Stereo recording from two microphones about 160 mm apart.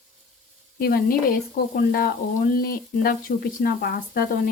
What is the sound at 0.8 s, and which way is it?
Speech, 70° left (ahead or behind).